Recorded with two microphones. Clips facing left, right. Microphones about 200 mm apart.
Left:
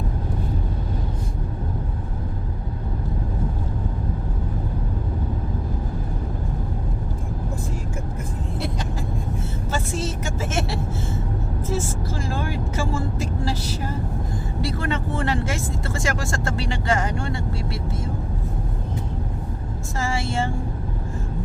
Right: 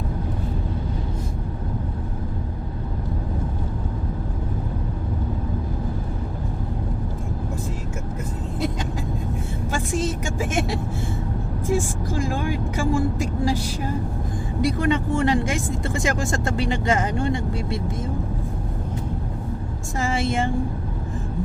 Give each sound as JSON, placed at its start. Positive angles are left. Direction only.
{"t": 9.7, "sound": "vehicle", "side_deg": -15}
{"t": 14.6, "sound": "speech", "side_deg": -15}
{"t": 20.0, "sound": "speech", "side_deg": -20}